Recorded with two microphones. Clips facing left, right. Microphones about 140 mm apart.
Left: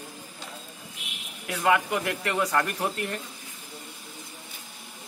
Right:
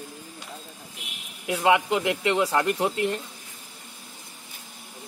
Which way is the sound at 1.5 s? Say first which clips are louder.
Right 3 dB; 20° right (ahead or behind).